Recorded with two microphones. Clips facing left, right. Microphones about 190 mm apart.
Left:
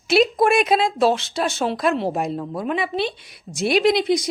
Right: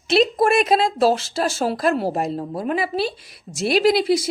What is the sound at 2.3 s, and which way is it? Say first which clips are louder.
Speech: even; 30° right (ahead or behind).